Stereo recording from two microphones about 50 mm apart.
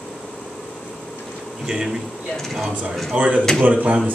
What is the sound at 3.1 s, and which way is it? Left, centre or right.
Speech, right.